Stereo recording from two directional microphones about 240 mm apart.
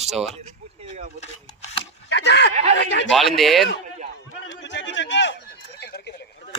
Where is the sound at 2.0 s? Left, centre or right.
Left.